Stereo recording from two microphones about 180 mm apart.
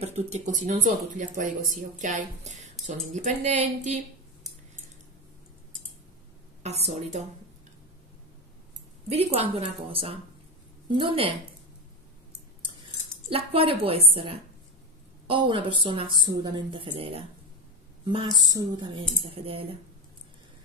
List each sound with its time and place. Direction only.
0.0 s a woman's voice: 40° right (ahead or behind)
6.6 s a woman's voice: 35° right (ahead or behind)
9.1 s a woman's voice: 35° right (ahead or behind)
13.3 s a woman's voice: 30° right (ahead or behind)